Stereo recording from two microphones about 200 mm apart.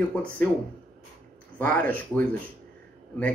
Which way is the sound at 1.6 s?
5° left (ahead or behind).